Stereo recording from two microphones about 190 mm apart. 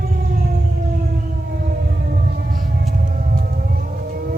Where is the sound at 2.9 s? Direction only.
50° right (ahead or behind).